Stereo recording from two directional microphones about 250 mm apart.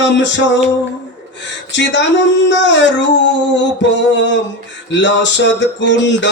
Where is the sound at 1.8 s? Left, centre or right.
Left.